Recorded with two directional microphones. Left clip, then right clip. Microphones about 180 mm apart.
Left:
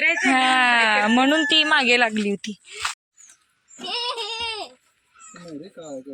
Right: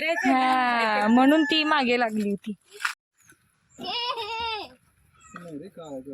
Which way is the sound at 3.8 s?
15° left (ahead or behind).